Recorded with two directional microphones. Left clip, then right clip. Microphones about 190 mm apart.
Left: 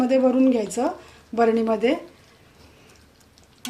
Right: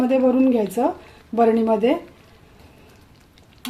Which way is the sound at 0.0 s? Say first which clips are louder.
Right 1 dB; 35° right (ahead or behind).